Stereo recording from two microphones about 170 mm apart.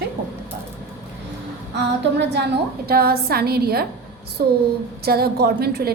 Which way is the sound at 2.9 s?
65° right (ahead or behind).